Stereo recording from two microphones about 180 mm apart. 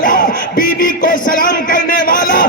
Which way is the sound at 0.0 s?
50° left (ahead or behind).